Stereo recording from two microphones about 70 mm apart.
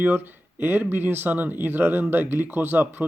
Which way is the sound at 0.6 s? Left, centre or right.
Right.